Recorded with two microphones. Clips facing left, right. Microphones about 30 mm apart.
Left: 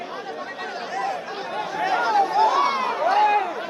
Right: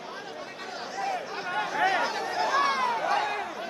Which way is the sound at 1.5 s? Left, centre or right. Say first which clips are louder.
Left 2 dB; centre.